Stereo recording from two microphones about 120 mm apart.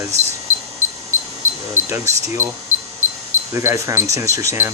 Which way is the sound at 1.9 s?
25° right (ahead or behind).